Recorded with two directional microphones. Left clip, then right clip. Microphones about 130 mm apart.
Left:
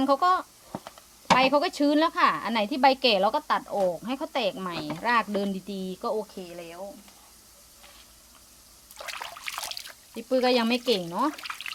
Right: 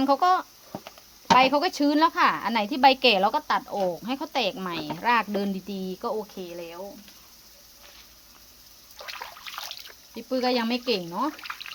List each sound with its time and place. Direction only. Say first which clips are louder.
0.0 s a woman's voice: right 1 dB; 30° right (ahead or behind)
9.0 s water: left 1 dB; 40° left (ahead or behind)
10.2 s speech: left 2 dB; 10° right (ahead or behind)
11.3 s frying: left 1 dB; 50° left (ahead or behind)